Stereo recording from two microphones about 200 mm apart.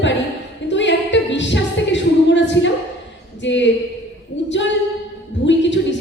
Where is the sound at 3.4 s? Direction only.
65° left (ahead or behind).